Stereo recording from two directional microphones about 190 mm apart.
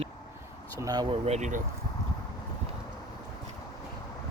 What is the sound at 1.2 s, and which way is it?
Speech, 35° right (ahead or behind).